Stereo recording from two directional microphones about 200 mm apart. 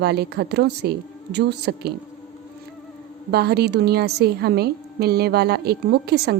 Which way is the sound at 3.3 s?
55° right (ahead or behind).